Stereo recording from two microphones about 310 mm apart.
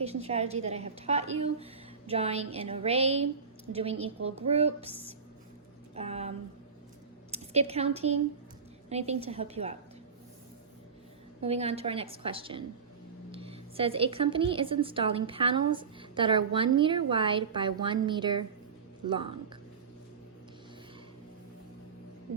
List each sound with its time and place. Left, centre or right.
0.0 s a woman's voice: centre
5.9 s a woman's voice: centre
11.3 s speech: centre